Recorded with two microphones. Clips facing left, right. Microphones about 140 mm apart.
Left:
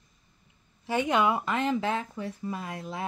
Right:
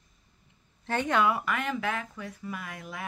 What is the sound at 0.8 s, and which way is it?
Speech, 15° left (ahead or behind).